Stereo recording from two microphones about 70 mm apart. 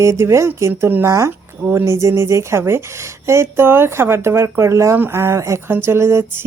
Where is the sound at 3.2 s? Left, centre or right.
Right.